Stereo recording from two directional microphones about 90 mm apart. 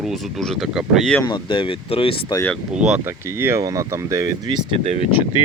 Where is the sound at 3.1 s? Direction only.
25° right (ahead or behind).